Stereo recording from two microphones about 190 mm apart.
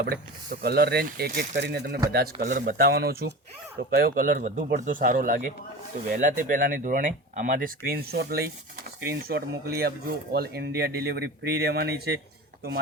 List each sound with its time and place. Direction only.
0.6 s speech: 55° right (ahead or behind)
1.6 s speech: 60° right (ahead or behind)
2.5 s speech: 45° right (ahead or behind)